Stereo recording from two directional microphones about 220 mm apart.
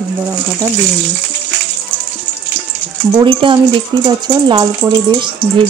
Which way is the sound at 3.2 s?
20° right (ahead or behind).